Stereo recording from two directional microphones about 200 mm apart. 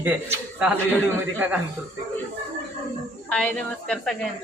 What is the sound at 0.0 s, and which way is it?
Speech, 10° right (ahead or behind).